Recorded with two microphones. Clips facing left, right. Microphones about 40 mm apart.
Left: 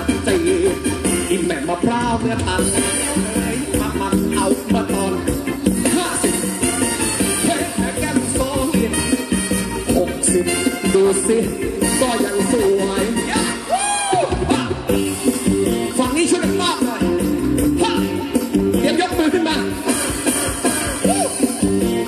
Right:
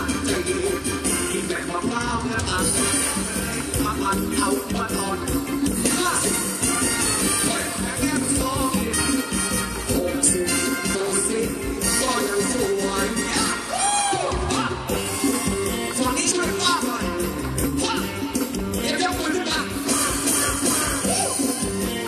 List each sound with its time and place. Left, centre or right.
4.4 s music: left
10.6 s music: left
17.7 s music: left